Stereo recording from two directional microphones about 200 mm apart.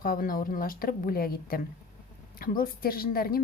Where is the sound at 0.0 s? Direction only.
45° left (ahead or behind).